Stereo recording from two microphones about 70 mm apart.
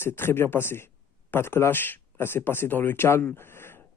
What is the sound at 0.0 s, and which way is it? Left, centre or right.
Speech, left.